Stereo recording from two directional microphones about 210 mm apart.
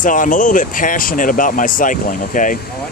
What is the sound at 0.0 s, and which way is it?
Speech, 40° left (ahead or behind).